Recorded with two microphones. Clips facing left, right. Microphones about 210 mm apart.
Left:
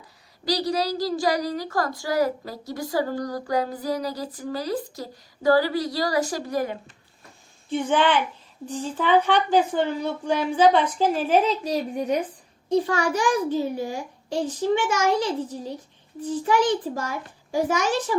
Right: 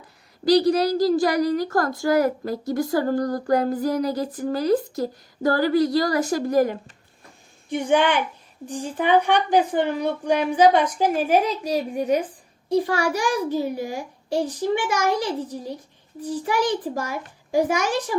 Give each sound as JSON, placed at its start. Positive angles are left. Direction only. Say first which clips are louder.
{"t": 0.4, "sound": "a woman's voice", "louder": "right 7 dB", "side_deg": -55}
{"t": 7.9, "sound": "a child's voice", "louder": "right 2 dB", "side_deg": -15}